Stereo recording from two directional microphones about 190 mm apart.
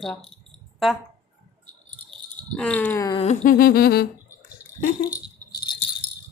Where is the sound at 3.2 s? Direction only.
40° left (ahead or behind).